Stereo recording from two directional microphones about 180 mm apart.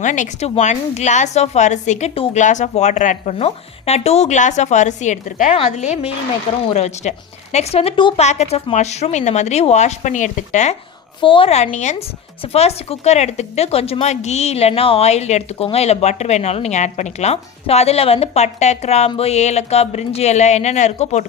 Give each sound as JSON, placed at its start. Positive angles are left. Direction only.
{"t": 0.0, "sound": "speech", "side_deg": 45}
{"t": 11.2, "sound": "speech", "side_deg": 30}